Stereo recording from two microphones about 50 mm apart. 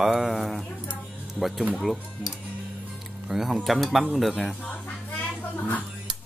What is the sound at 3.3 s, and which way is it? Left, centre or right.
Speech, centre.